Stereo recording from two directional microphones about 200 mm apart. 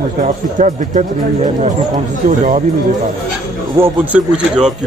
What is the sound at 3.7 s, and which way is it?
Speech, 10° right (ahead or behind).